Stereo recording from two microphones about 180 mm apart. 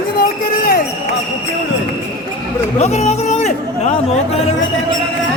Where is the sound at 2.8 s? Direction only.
40° left (ahead or behind).